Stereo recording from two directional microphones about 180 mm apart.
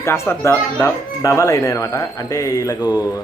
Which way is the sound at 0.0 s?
15° left (ahead or behind).